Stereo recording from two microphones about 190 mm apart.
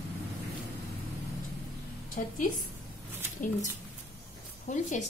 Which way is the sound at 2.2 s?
45° left (ahead or behind).